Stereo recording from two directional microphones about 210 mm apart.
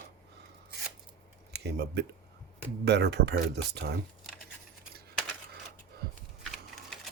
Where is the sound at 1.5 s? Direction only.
55° right (ahead or behind).